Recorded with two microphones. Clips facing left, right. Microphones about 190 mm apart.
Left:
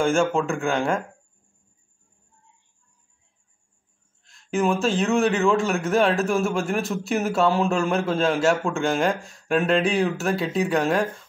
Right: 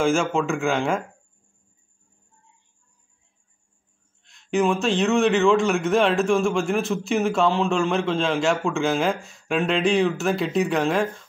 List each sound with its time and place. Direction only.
0.0 s a man's voice: centre (ahead or behind)
4.2 s a man's voice: centre (ahead or behind)